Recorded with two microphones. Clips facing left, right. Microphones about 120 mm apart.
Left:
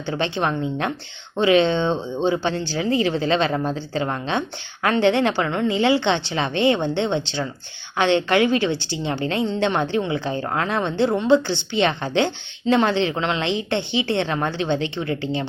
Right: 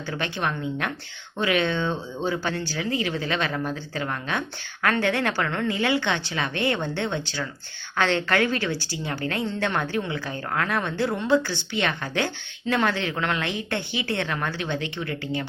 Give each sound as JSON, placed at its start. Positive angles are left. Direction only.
{"t": 0.0, "sound": "a woman's voice", "side_deg": 25}